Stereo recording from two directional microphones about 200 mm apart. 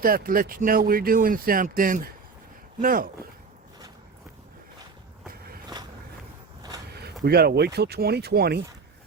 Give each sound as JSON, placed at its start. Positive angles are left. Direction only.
{"t": 0.0, "sound": "speech", "side_deg": -45}
{"t": 7.0, "sound": "speech", "side_deg": -50}